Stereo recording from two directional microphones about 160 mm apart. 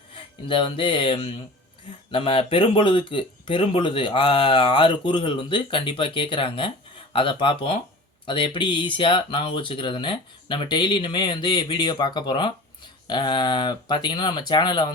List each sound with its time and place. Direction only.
0.4 s speech: 30° left (ahead or behind)